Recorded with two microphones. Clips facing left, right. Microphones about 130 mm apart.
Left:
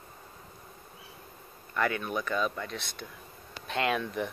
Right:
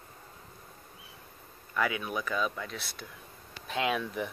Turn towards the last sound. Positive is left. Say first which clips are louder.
# left 1 dB
turn(degrees=-5)  # may be behind; listen again after turning